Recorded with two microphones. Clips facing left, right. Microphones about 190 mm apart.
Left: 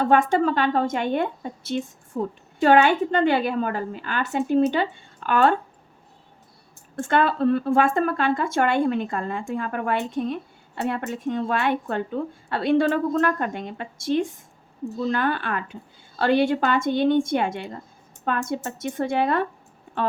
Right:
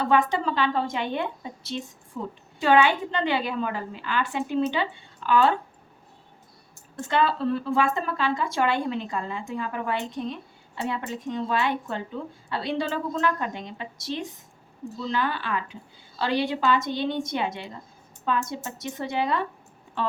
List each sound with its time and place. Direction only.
0.0 s speech: 50° left (ahead or behind)
6.9 s speech: 55° left (ahead or behind)